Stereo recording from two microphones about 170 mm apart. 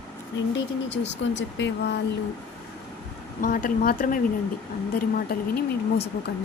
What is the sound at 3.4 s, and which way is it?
A woman's voice, 55° left (ahead or behind).